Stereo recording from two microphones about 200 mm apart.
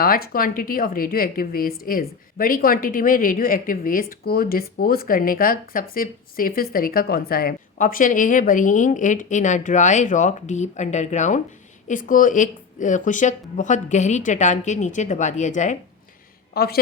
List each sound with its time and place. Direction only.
0.0 s a woman's voice: 45° left (ahead or behind)
16.6 s a woman's voice: 50° left (ahead or behind)